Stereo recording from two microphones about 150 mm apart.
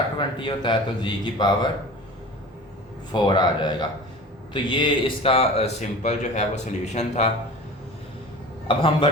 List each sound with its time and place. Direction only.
0.2 s a man's voice: 35° left (ahead or behind)
3.1 s a man's voice: 30° left (ahead or behind); by 7.3 s 50° left (ahead or behind)
8.6 s a man's voice: 35° left (ahead or behind)